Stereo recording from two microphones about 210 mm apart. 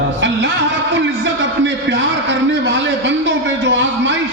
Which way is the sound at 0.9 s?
60° right (ahead or behind).